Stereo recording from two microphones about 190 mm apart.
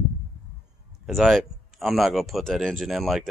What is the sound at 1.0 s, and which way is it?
Speech, centre (ahead or behind).